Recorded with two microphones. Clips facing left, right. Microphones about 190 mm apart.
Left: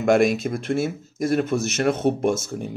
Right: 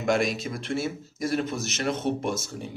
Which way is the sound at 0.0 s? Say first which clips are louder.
Left 7 dB; 55° left (ahead or behind).